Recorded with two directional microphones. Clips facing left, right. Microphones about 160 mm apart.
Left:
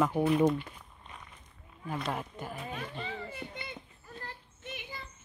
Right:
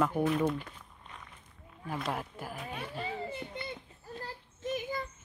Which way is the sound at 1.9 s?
Centre (ahead or behind).